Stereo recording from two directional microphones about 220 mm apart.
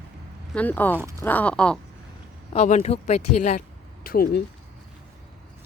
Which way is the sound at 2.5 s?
30° left (ahead or behind).